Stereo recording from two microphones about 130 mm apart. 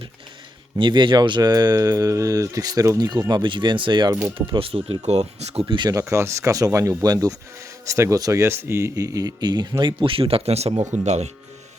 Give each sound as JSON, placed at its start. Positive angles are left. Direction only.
{"t": 0.8, "sound": "speech", "side_deg": -35}
{"t": 5.7, "sound": "speech", "side_deg": -35}
{"t": 6.0, "sound": "speech", "side_deg": -20}